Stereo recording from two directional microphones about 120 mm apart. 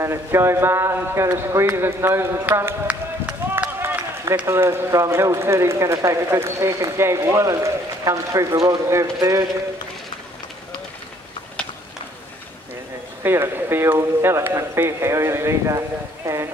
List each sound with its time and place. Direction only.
0.0 s speech: 20° right (ahead or behind)
2.9 s run: 10° right (ahead or behind)
3.8 s run: 20° right (ahead or behind)
4.5 s speech: 20° right (ahead or behind)
13.2 s speech: 20° right (ahead or behind)